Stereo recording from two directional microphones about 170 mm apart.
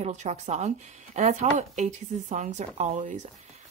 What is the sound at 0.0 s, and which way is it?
A woman's voice, 40° right (ahead or behind).